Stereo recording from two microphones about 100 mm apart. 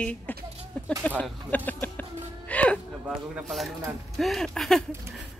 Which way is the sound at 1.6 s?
15° left (ahead or behind).